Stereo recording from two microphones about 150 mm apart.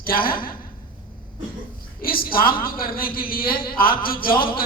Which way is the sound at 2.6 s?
75° left (ahead or behind).